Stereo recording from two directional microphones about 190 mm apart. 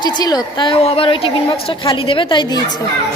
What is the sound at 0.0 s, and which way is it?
A woman's voice, 20° left (ahead or behind).